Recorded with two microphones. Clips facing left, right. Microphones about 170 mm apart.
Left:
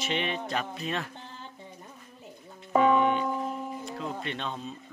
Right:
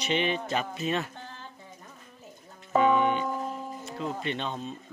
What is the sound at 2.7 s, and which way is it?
Music, centre (ahead or behind).